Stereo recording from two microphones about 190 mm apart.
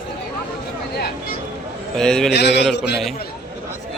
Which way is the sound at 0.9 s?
55° left (ahead or behind).